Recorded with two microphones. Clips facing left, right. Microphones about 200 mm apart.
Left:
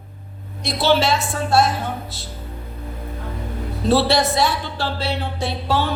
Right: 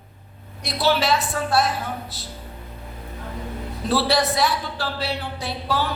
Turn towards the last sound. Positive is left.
turn(degrees=25)  # may be behind; listen again after turning